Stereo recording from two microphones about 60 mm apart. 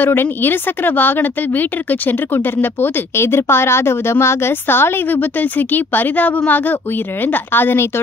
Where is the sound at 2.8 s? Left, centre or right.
Left.